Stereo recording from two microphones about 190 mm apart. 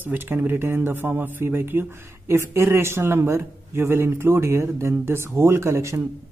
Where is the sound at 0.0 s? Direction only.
10° right (ahead or behind).